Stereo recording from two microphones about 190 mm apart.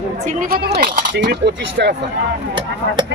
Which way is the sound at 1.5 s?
65° right (ahead or behind).